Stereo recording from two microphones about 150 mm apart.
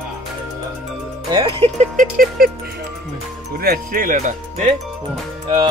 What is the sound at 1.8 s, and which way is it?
Speech, 55° right (ahead or behind).